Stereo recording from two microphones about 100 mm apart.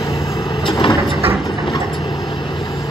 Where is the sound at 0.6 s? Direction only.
60° left (ahead or behind).